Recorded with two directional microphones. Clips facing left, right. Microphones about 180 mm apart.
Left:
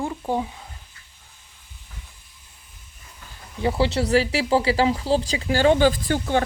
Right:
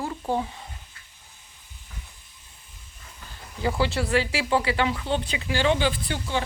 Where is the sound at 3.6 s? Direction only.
25° left (ahead or behind).